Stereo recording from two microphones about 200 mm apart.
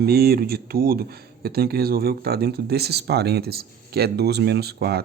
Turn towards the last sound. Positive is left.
turn(degrees=-55)  # may be behind; listen again after turning